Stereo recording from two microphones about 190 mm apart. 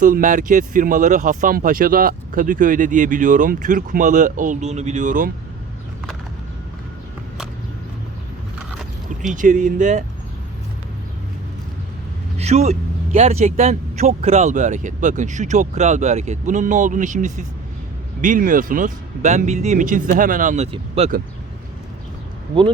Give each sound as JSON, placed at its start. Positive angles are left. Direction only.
{"t": 0.0, "sound": "speech", "side_deg": -45}
{"t": 8.5, "sound": "a sound", "side_deg": 0}
{"t": 9.3, "sound": "speech", "side_deg": -40}
{"t": 12.4, "sound": "speech", "side_deg": -35}